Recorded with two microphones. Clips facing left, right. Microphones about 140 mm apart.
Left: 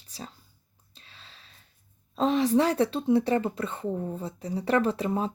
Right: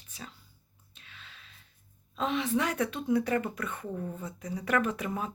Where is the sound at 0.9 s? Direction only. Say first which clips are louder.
Even; 30° left (ahead or behind).